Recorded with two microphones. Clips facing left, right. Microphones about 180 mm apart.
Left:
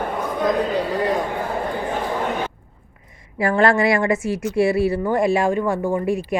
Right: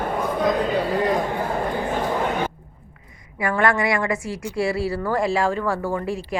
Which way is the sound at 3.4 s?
30° left (ahead or behind).